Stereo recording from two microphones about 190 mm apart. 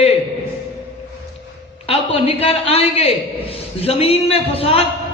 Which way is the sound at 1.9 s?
30° left (ahead or behind).